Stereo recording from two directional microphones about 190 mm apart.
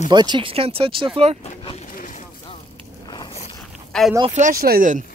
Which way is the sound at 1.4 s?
30° left (ahead or behind).